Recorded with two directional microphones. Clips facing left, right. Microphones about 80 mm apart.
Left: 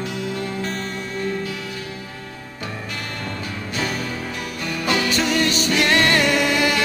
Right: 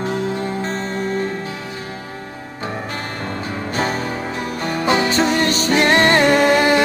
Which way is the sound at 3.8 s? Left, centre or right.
Right.